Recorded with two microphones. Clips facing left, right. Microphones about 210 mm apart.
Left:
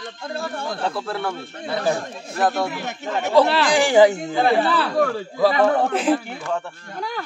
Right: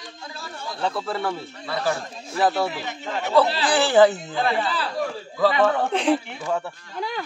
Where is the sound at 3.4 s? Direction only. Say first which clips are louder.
Left 4 dB; 65° left (ahead or behind).